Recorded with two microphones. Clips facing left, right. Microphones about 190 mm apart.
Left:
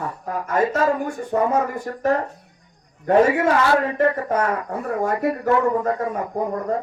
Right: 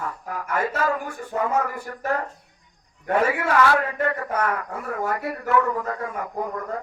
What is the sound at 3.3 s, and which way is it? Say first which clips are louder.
A man's voice: left 3 dB; 25° left (ahead or behind).